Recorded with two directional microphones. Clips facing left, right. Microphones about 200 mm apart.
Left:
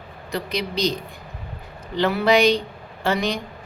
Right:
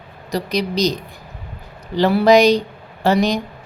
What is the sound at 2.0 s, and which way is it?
Speech, 35° right (ahead or behind).